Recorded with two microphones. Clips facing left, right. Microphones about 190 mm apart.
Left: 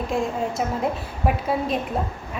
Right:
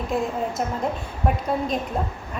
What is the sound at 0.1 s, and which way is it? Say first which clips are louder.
A woman's voice: right 1 dB; centre (ahead or behind).